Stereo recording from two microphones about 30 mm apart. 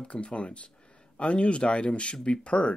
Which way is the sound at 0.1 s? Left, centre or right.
Left.